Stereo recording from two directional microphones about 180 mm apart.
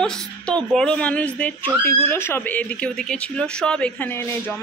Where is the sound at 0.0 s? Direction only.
5° left (ahead or behind).